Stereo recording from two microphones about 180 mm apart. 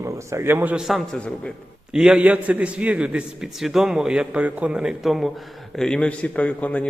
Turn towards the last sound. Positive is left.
turn(degrees=5)  # may be behind; listen again after turning